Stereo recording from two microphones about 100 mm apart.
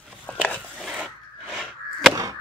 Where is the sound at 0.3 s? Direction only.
15° left (ahead or behind).